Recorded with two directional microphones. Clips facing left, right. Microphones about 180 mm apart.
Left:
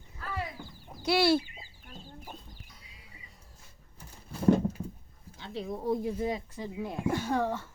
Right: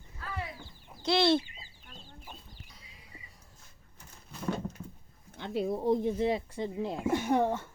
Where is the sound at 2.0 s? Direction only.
45° left (ahead or behind).